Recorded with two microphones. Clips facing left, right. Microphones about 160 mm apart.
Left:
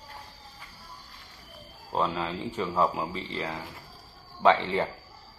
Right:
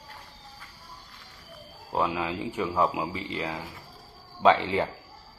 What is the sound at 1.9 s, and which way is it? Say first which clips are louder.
Speech: right 1 dB; 10° right (ahead or behind).